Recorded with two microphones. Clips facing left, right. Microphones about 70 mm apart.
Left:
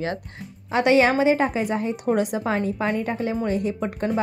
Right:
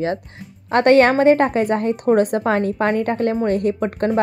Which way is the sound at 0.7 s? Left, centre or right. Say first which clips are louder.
Right 5 dB; right.